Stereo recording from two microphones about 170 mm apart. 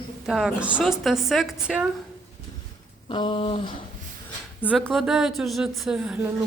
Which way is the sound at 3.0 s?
30° left (ahead or behind).